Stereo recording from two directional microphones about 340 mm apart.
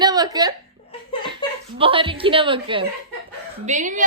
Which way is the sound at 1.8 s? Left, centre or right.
Centre.